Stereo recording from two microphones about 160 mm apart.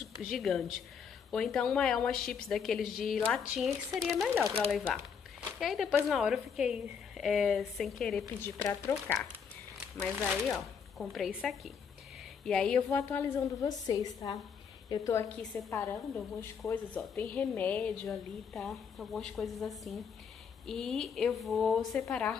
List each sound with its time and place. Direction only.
0.2 s a woman's voice: centre (ahead or behind)
8.4 s a woman's voice: 15° left (ahead or behind)
10.1 s a woman's voice: 5° right (ahead or behind)
13.6 s a woman's voice: 20° left (ahead or behind); by 22.4 s 5° left (ahead or behind)